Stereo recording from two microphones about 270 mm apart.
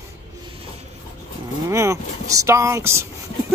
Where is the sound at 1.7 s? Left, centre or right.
Centre.